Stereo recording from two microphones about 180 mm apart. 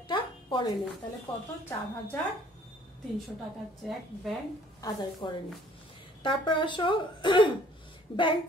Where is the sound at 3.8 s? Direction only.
Centre (ahead or behind).